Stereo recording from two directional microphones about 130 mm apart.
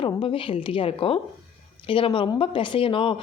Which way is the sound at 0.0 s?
40° left (ahead or behind).